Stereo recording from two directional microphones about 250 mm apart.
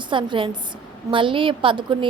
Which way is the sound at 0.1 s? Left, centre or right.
Centre.